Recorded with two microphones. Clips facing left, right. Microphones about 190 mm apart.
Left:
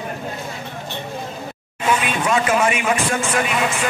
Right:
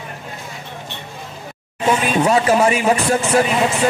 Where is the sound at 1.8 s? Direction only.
35° right (ahead or behind).